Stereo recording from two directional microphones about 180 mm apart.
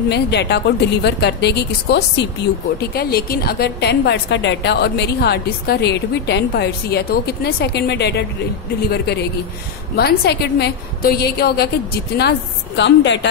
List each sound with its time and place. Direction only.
0.1 s speech: 70° left (ahead or behind)
2.8 s a woman's voice: 60° left (ahead or behind); by 13.3 s 75° left (ahead or behind)